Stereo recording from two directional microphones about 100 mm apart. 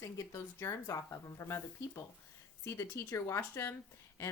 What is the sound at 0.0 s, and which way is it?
Speech, 30° left (ahead or behind).